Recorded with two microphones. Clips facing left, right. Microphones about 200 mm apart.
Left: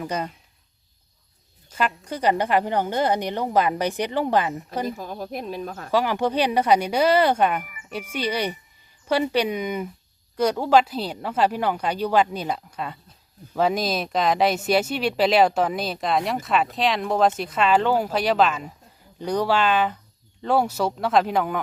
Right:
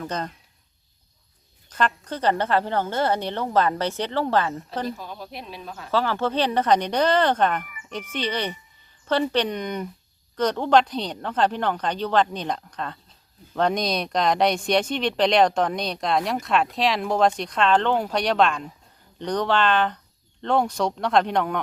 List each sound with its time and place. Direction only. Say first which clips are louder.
0.0 s a woman's voice: left 2 dB; 10° left (ahead or behind)
1.7 s a woman's voice: right 1 dB; 10° left (ahead or behind)
4.9 s speech: left 3 dB; 45° left (ahead or behind)
5.9 s a woman's voice: left 1 dB; 15° left (ahead or behind)